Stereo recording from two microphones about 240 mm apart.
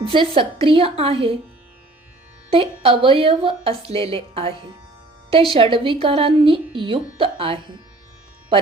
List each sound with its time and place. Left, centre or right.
0.0 s a woman's voice: right
2.5 s a woman's voice: right